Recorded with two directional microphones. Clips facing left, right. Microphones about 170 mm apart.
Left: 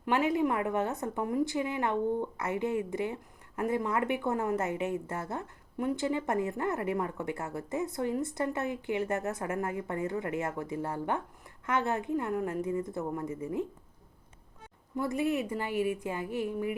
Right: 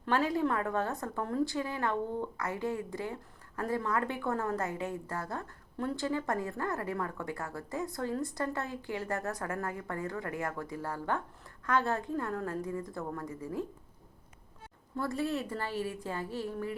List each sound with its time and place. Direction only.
0.0 s a woman's voice: 20° left (ahead or behind)
14.9 s a woman's voice: 15° left (ahead or behind)